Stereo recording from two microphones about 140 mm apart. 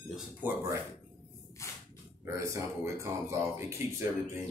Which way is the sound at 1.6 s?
20° left (ahead or behind).